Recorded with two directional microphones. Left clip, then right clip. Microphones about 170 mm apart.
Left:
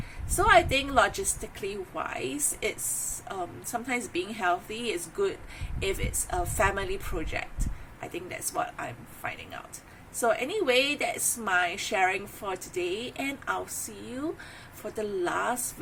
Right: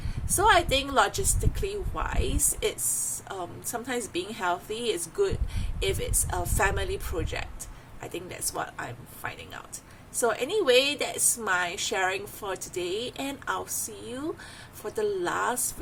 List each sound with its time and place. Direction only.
0.3 s a woman's voice: 15° right (ahead or behind)
10.2 s a woman's voice: 15° right (ahead or behind)
14.9 s a woman's voice: 20° right (ahead or behind)